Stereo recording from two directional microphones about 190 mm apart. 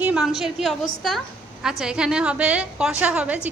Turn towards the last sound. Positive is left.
turn(degrees=-5)  # may be behind; listen again after turning